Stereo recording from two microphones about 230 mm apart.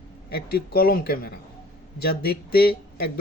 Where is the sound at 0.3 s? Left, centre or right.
Left.